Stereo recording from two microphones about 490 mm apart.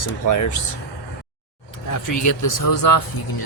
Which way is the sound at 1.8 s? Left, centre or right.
Left.